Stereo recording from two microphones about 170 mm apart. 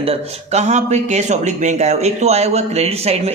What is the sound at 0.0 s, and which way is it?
Speech, 35° right (ahead or behind).